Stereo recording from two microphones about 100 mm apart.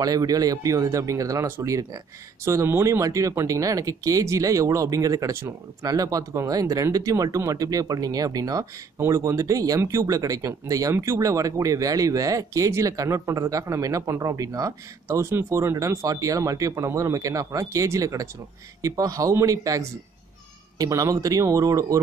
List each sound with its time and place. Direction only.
0.0 s speech: 35° right (ahead or behind)